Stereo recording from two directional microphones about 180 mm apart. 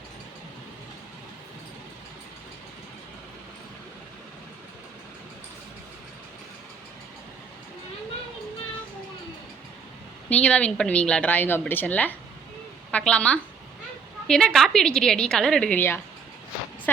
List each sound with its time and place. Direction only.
10.2 s a woman's voice: 5° left (ahead or behind)